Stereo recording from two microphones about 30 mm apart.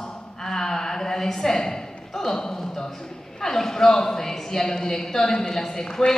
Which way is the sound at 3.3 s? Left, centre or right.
Centre.